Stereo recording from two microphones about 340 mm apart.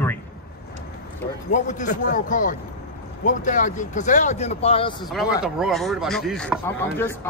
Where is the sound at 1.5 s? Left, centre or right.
Left.